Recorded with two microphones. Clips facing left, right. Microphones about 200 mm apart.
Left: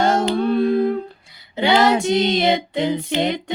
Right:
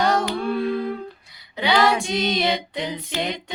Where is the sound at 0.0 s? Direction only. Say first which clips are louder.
Left 4 dB; 25° left (ahead or behind).